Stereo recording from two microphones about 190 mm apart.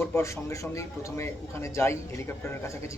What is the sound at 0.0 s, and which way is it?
A man's voice, 15° left (ahead or behind).